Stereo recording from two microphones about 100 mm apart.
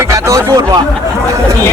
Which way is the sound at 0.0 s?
30° right (ahead or behind).